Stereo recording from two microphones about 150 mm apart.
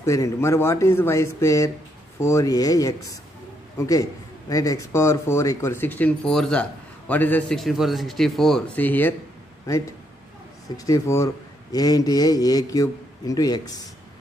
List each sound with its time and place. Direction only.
0.0 s a man's voice: 20° left (ahead or behind)
10.9 s a man's voice: 20° left (ahead or behind)